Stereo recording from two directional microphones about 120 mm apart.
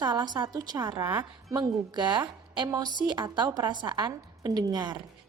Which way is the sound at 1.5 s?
35° right (ahead or behind).